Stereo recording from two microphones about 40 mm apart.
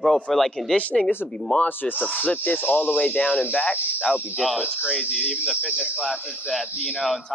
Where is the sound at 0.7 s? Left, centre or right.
Left.